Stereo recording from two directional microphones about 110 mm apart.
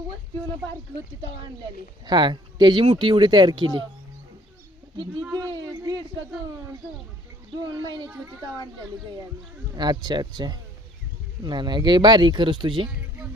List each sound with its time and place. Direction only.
2.0 s speech: 45° right (ahead or behind)
2.8 s speech: 55° right (ahead or behind)
5.3 s speech: 35° right (ahead or behind)
7.6 s speech: 40° right (ahead or behind)
8.1 s a child's voice: 25° right (ahead or behind)
9.7 s speech: 40° right (ahead or behind)